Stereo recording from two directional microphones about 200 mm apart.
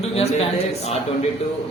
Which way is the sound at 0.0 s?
30° left (ahead or behind).